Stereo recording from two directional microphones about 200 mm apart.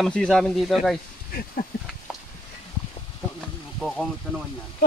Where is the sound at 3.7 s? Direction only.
5° left (ahead or behind).